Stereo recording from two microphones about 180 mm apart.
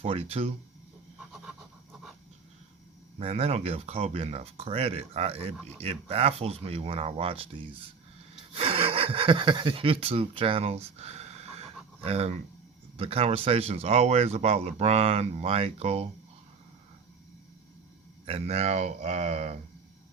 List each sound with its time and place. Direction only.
0.0 s speech: 35° right (ahead or behind)
3.2 s speech: 35° right (ahead or behind)
18.3 s speech: 35° right (ahead or behind)